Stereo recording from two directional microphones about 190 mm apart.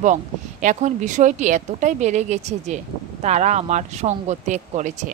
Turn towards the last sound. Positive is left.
turn(degrees=-40)  # may be behind; listen again after turning